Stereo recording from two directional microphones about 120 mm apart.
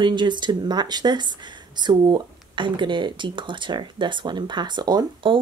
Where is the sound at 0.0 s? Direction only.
40° right (ahead or behind).